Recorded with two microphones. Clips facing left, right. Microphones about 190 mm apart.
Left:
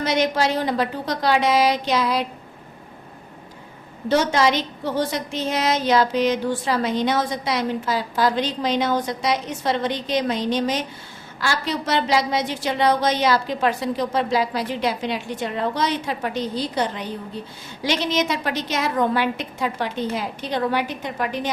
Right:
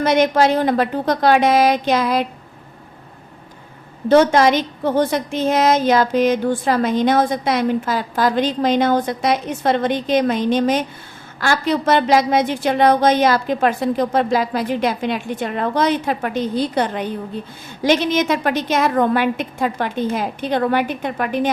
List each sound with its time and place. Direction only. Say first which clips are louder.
0.0 s a woman's voice: right 6 dB; 55° right (ahead or behind)
4.1 s a woman's voice: right 6 dB; 55° right (ahead or behind)